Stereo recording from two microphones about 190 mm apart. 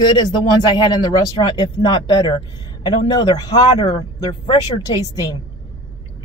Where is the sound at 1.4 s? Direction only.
25° left (ahead or behind).